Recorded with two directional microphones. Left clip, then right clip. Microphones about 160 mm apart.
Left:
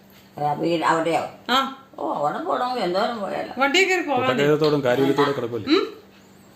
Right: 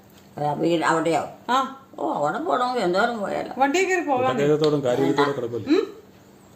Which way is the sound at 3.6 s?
90° right.